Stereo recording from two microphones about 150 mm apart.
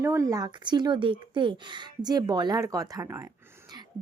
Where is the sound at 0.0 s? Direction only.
20° right (ahead or behind).